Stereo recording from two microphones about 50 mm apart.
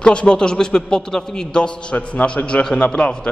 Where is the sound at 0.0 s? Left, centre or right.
Centre.